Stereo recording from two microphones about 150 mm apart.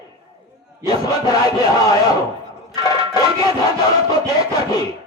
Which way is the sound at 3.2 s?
25° left (ahead or behind).